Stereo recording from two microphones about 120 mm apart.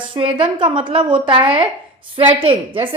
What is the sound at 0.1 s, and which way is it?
A woman's voice, 45° right (ahead or behind).